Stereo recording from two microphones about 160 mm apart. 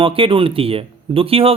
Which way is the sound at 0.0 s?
35° right (ahead or behind).